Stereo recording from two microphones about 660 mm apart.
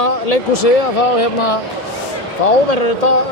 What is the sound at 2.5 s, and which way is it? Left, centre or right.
Speech, left.